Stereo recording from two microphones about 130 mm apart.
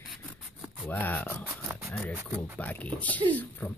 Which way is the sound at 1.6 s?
Centre (ahead or behind).